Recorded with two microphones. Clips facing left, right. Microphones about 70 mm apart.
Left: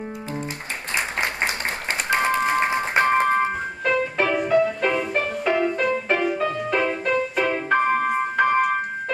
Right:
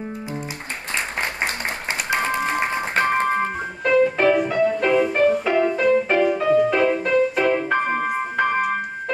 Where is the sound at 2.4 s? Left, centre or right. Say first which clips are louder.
Left 2 dB; centre.